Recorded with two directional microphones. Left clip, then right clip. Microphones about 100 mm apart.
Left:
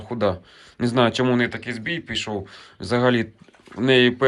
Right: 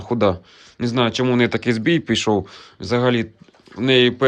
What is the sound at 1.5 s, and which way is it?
Speech, 50° right (ahead or behind).